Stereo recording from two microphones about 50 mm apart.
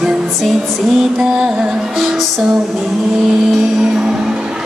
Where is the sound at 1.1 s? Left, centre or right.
Centre.